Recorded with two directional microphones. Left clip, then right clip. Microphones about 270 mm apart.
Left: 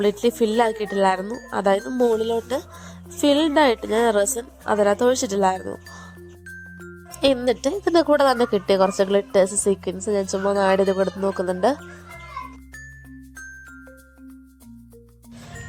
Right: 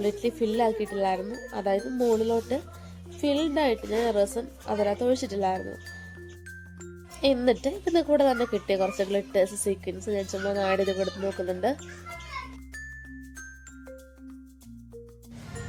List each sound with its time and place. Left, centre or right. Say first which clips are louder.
0.0 s a woman's voice: left 7 dB; left
7.2 s a woman's voice: left 4 dB; left